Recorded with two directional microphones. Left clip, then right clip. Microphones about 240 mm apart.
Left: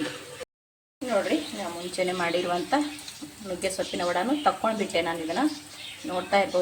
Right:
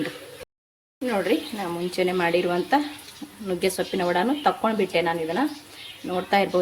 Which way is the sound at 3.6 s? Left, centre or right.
Right.